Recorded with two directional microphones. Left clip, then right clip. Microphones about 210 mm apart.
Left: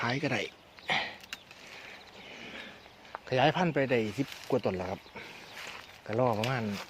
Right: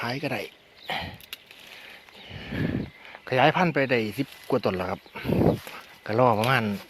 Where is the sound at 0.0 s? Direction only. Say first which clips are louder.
Right 2 dB; 15° right (ahead or behind).